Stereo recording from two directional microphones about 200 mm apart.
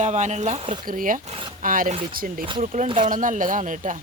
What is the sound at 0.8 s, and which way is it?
Speech, 40° right (ahead or behind).